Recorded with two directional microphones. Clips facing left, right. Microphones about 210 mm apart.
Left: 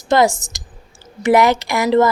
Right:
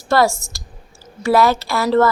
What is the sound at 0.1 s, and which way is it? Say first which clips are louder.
A woman's voice: left 2 dB; 20° left (ahead or behind).